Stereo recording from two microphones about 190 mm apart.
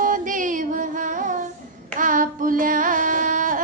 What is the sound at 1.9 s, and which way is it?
Child singing, 45° right (ahead or behind).